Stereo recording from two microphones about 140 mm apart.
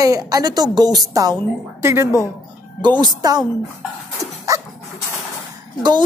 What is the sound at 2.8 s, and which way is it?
Speech, 30° right (ahead or behind).